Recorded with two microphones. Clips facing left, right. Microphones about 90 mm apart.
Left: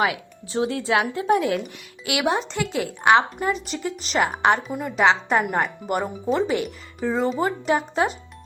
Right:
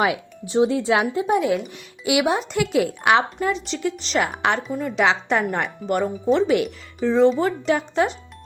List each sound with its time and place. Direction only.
0.0 s speech: 25° right (ahead or behind)
2.3 s a woman's voice: 5° right (ahead or behind)